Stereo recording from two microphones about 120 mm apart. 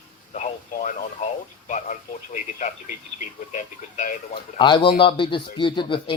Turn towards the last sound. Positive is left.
turn(degrees=45)  # may be behind; listen again after turning